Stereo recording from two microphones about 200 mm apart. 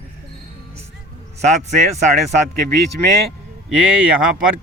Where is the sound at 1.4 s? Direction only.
35° right (ahead or behind).